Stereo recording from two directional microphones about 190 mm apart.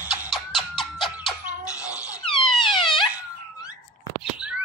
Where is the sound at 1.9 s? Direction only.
25° left (ahead or behind).